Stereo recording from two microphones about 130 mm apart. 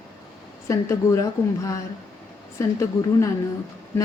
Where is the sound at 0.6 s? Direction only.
25° left (ahead or behind).